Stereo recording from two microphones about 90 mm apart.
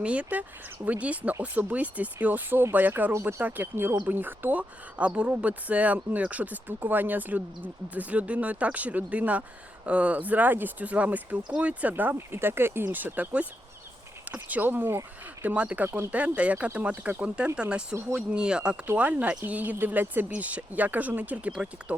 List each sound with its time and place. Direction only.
0.0 s speech: 15° right (ahead or behind)
3.1 s speech: 30° right (ahead or behind)
15.5 s speech: 15° right (ahead or behind)